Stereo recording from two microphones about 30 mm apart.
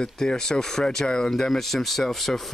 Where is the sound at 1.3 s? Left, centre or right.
Centre.